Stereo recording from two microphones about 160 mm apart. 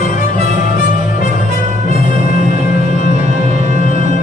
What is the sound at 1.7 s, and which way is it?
Music, 45° right (ahead or behind).